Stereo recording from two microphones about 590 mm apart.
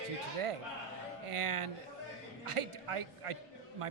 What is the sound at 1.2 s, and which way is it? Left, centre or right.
Speech, right.